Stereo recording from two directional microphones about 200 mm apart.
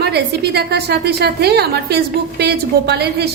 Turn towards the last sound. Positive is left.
turn(degrees=-55)  # may be behind; listen again after turning